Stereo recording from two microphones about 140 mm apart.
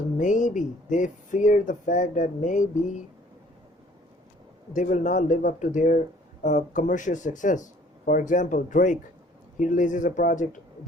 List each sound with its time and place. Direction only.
0.2 s speech: 65° left (ahead or behind)
4.7 s speech: 60° left (ahead or behind)